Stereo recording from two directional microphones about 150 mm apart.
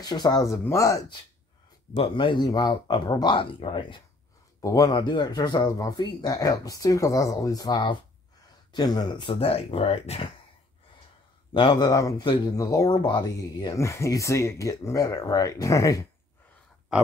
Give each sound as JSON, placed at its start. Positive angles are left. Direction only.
{"t": 0.0, "sound": "speech", "side_deg": 25}
{"t": 2.0, "sound": "speech", "side_deg": 35}
{"t": 4.6, "sound": "speech", "side_deg": 25}
{"t": 11.5, "sound": "speech", "side_deg": 30}